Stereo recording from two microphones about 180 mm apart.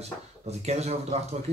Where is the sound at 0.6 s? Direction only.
35° right (ahead or behind).